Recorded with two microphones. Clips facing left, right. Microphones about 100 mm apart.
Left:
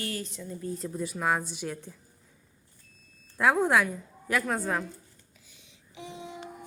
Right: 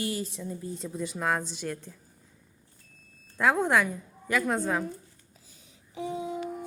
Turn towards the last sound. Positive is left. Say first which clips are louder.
# right 8 dB
turn(degrees=-40)  # may be behind; listen again after turning